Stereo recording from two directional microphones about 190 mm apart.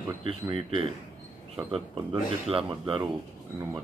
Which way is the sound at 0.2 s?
30° right (ahead or behind).